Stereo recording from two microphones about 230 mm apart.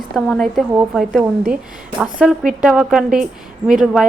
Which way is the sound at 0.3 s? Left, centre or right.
Centre.